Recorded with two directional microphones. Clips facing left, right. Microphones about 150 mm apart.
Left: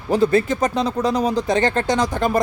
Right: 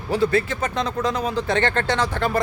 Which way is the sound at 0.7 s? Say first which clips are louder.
Left 3 dB; 10° left (ahead or behind).